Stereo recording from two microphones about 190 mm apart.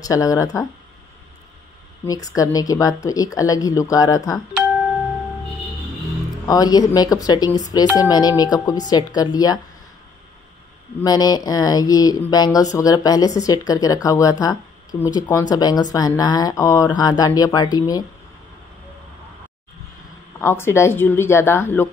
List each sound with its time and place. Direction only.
0.0 s a woman's voice: 20° left (ahead or behind)
2.0 s speech: 20° left (ahead or behind)
6.4 s speech: 20° left (ahead or behind)
11.0 s speech: 20° left (ahead or behind)
20.3 s a woman's voice: 10° left (ahead or behind)